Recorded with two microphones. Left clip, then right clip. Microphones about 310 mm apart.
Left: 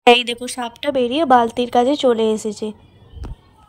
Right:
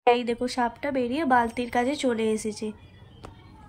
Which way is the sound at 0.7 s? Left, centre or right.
Left.